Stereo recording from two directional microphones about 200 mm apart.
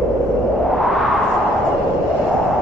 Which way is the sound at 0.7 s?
Centre (ahead or behind).